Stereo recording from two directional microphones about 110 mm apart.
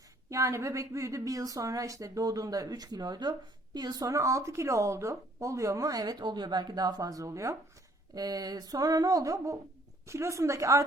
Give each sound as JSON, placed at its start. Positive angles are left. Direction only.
{"t": 0.3, "sound": "a woman's voice", "side_deg": -30}